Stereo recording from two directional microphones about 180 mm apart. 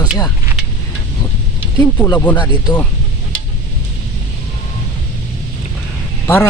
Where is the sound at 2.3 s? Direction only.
25° left (ahead or behind).